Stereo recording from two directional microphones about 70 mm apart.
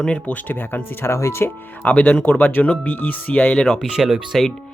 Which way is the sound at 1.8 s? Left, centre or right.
Centre.